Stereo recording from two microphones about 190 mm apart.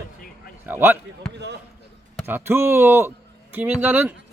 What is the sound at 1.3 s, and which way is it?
Speech, 65° right (ahead or behind).